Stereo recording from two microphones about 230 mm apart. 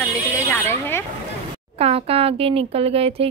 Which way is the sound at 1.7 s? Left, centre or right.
Right.